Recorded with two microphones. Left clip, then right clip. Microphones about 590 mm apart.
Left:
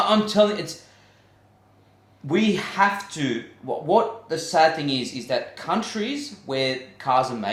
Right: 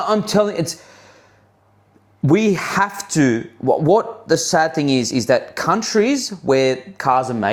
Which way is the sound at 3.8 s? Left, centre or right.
Right.